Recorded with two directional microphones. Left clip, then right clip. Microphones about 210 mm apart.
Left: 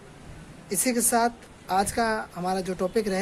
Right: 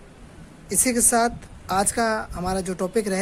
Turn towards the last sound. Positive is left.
turn(degrees=-25)  # may be behind; listen again after turning